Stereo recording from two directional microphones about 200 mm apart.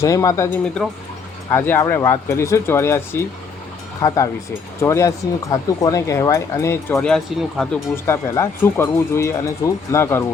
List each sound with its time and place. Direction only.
0.0 s speech: 15° left (ahead or behind)